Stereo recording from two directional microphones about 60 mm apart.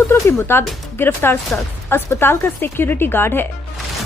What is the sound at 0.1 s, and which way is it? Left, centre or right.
Speech, left.